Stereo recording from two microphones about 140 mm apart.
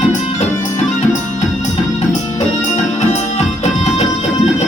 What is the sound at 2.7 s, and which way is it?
Music, 55° left (ahead or behind).